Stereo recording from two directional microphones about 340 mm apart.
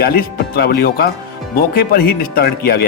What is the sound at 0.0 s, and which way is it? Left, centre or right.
A man's voice, left.